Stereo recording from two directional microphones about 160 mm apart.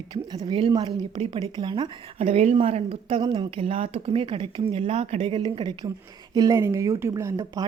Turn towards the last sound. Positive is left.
turn(degrees=-20)  # may be behind; listen again after turning